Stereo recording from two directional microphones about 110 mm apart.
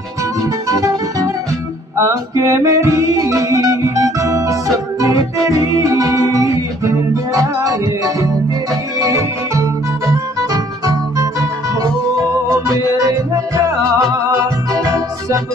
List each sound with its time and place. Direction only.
0.7 s music: 30° right (ahead or behind)
12.4 s music: 30° right (ahead or behind)